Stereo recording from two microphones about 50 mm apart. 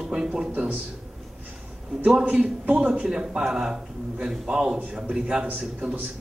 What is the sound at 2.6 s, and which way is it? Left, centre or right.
A man's voice, right.